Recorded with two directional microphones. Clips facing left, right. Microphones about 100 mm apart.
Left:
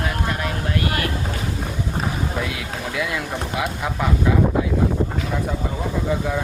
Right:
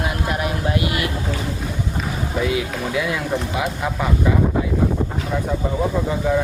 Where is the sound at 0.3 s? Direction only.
15° right (ahead or behind).